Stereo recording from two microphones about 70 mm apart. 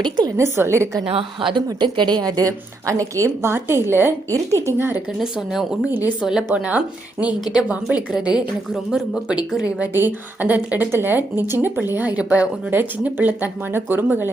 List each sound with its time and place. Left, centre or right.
0.0 s a woman's voice: right
0.3 s a woman's voice: right
1.5 s a woman's voice: right
4.3 s a woman's voice: right
4.8 s a woman's voice: right
5.2 s speech: centre
6.5 s speech: centre
9.9 s speech: right